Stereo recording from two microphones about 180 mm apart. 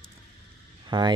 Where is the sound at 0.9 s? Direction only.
25° right (ahead or behind).